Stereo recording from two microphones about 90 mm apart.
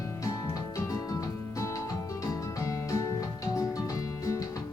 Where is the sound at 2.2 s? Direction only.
40° left (ahead or behind).